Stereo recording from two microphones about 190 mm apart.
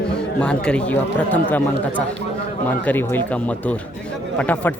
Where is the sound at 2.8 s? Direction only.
10° left (ahead or behind).